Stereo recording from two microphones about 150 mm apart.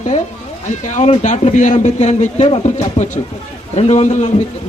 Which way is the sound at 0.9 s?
50° left (ahead or behind).